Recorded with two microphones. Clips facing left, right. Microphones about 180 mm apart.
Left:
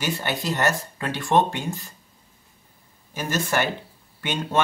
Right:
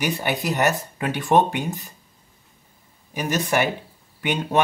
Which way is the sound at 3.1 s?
15° right (ahead or behind).